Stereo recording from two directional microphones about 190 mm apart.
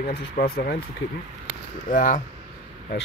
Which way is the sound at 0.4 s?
55° left (ahead or behind).